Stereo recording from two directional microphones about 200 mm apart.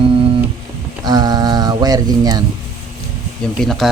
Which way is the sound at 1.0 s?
20° right (ahead or behind).